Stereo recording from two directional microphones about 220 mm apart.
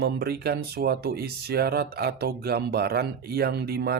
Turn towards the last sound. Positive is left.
turn(degrees=-45)  # may be behind; listen again after turning